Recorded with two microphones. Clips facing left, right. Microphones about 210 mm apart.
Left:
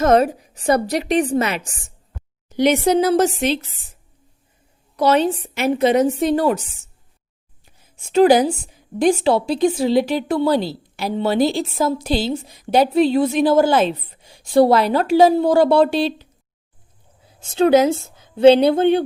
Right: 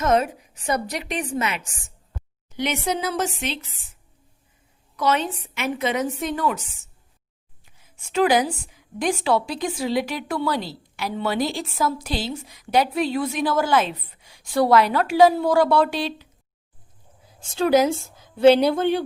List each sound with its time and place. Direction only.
0.0 s a woman's voice: 35° left (ahead or behind)
4.9 s a woman's voice: 35° left (ahead or behind)
8.1 s a woman's voice: 30° left (ahead or behind)
17.5 s a woman's voice: 25° left (ahead or behind)